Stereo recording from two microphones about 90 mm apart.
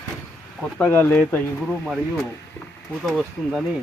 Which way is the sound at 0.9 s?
25° left (ahead or behind).